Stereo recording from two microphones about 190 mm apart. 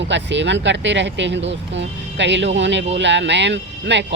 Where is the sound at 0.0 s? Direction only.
70° right (ahead or behind).